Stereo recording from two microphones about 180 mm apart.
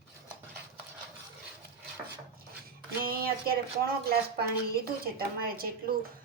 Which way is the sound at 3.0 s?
55° right (ahead or behind).